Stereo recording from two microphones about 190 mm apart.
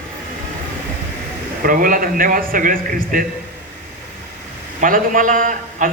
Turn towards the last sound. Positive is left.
turn(degrees=-40)  # may be behind; listen again after turning